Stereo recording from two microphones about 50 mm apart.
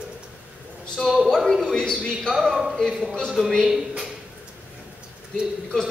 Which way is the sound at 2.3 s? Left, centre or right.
Centre.